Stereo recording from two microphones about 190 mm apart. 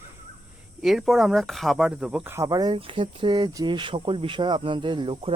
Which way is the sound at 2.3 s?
20° right (ahead or behind).